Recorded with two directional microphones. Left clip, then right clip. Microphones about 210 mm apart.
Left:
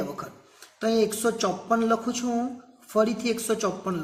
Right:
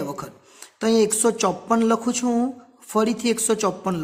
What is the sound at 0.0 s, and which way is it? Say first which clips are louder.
A woman's voice: right 3 dB; 50° right (ahead or behind).